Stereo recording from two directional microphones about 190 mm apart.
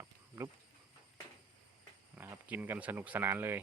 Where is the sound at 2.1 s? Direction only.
10° right (ahead or behind).